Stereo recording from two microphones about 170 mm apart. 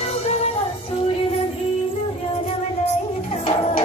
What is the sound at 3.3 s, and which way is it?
Music, 35° left (ahead or behind).